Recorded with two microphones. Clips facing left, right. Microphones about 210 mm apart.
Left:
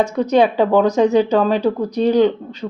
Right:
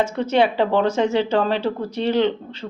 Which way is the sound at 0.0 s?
15° left (ahead or behind).